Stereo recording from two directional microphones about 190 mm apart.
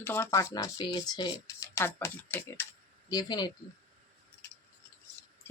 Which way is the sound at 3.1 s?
20° left (ahead or behind).